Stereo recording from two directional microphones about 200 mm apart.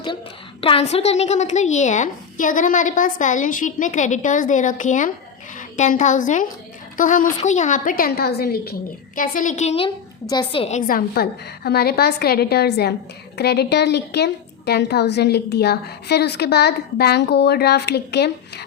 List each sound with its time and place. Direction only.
0.6 s a woman's voice: 30° left (ahead or behind); by 8.7 s 50° left (ahead or behind)
9.1 s a woman's voice: 40° left (ahead or behind)